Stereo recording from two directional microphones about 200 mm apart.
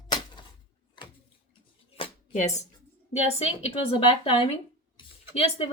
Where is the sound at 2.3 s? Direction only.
35° left (ahead or behind).